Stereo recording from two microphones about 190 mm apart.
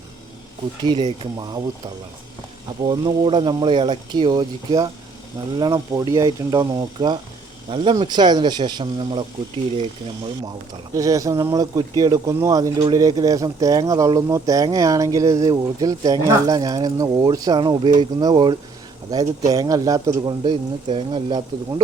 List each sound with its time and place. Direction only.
0.8 s speech: 25° right (ahead or behind)
2.8 s speech: 25° right (ahead or behind)
10.9 s speech: 15° right (ahead or behind)